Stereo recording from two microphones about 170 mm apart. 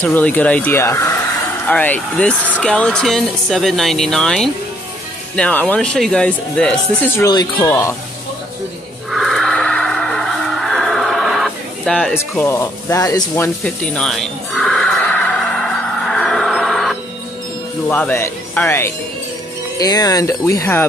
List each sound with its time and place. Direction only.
0.0 s speech: 10° left (ahead or behind)
7.2 s speech: 20° left (ahead or behind)
9.1 s music: centre (ahead or behind)
13.9 s music: centre (ahead or behind)
17.8 s speech: 10° left (ahead or behind)
19.8 s speech: 20° left (ahead or behind)